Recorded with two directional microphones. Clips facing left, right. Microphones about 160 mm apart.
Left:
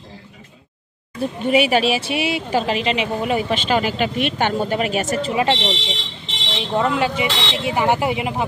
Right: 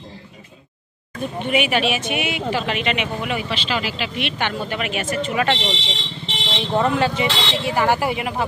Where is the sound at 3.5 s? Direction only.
50° left (ahead or behind).